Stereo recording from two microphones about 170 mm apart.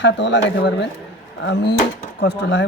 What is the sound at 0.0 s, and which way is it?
Speech, 90° left.